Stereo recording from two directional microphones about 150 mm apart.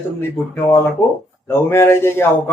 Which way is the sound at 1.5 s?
15° left (ahead or behind).